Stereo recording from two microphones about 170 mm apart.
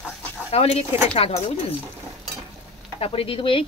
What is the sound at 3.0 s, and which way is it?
Speech, 35° left (ahead or behind).